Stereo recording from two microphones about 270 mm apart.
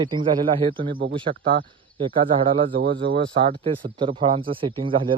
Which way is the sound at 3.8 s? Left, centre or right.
Centre.